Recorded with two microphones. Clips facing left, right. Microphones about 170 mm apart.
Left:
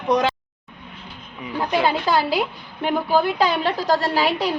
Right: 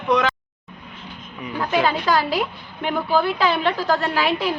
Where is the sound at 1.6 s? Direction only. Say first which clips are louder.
Even; 20° left (ahead or behind).